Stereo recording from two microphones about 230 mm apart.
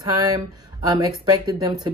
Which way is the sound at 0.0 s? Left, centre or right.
Centre.